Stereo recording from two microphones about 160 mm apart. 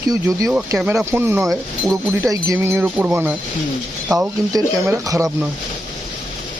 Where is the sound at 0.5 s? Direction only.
5° right (ahead or behind).